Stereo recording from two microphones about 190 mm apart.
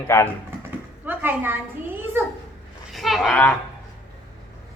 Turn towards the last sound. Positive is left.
turn(degrees=5)  # may be behind; listen again after turning